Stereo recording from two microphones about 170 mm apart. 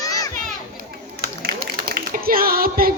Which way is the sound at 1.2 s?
65° right (ahead or behind).